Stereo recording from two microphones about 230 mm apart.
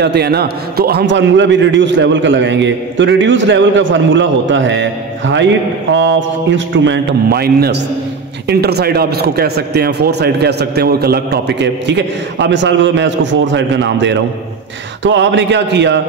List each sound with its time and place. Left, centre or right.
0.0 s a man's voice: right